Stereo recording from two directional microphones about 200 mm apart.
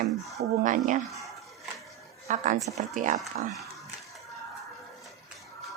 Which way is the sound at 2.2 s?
40° right (ahead or behind).